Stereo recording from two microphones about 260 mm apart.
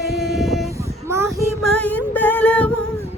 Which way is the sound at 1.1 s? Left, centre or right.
Centre.